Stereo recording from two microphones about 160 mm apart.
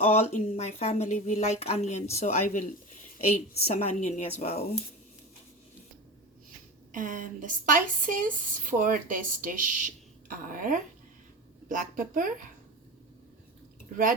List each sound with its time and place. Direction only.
0.0 s a woman's voice: 40° left (ahead or behind)
6.9 s a woman's voice: 55° right (ahead or behind)